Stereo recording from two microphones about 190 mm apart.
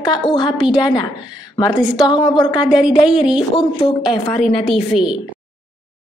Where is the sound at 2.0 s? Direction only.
20° left (ahead or behind).